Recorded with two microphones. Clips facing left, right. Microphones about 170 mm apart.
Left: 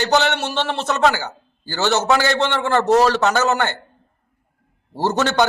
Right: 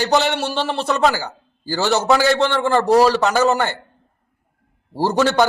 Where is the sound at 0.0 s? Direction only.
Centre (ahead or behind).